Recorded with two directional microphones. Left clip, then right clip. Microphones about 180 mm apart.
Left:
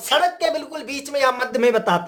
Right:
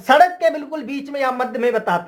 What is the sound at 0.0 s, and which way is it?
Speech, 25° left (ahead or behind).